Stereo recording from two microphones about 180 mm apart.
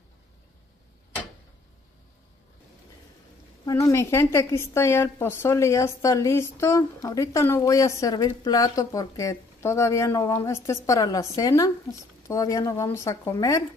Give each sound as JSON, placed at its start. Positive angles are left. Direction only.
{"t": 3.6, "sound": "a woman's voice", "side_deg": 20}